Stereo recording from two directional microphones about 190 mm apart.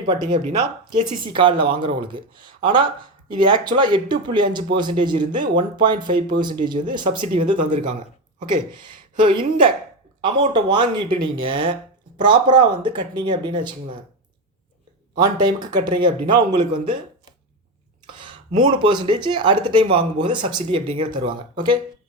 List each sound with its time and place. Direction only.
1.2 s speech: 25° right (ahead or behind)
9.2 s speech: 25° right (ahead or behind)
15.1 s speech: 20° right (ahead or behind)
18.0 s speech: 25° right (ahead or behind)